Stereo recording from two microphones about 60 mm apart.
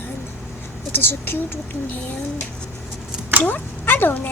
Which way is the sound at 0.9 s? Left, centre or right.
Left.